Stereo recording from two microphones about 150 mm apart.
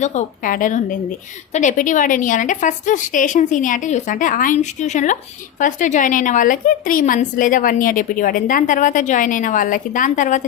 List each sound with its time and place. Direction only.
0.0 s a woman's voice: 50° left (ahead or behind)